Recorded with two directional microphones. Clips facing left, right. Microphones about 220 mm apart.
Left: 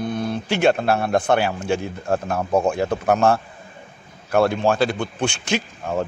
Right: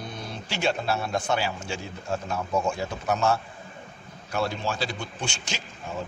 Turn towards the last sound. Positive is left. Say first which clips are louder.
# left 11 dB
turn(degrees=60)  # may be behind; listen again after turning